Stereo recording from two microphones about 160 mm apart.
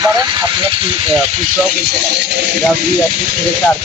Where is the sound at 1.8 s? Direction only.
90° right.